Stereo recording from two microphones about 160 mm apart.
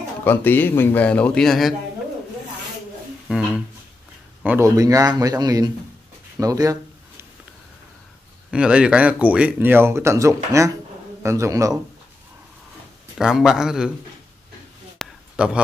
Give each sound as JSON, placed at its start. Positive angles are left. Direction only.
{"t": 0.2, "sound": "a man's voice", "side_deg": 10}
{"t": 3.3, "sound": "a man's voice", "side_deg": -5}
{"t": 4.6, "sound": "speech", "side_deg": -20}
{"t": 6.4, "sound": "a sound", "side_deg": -20}
{"t": 8.5, "sound": "speech", "side_deg": -5}
{"t": 13.2, "sound": "a man's voice", "side_deg": -5}
{"t": 15.0, "sound": "a sound", "side_deg": -5}